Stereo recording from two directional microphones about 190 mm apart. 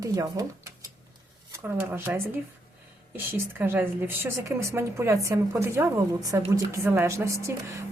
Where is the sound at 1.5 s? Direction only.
10° right (ahead or behind).